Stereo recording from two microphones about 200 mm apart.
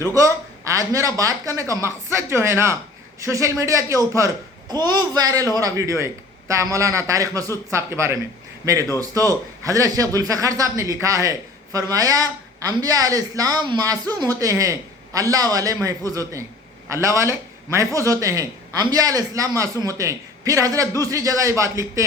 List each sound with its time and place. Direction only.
0.0 s a man's voice: 15° right (ahead or behind)